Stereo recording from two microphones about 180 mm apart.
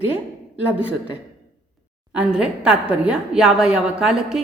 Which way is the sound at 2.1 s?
5° right (ahead or behind).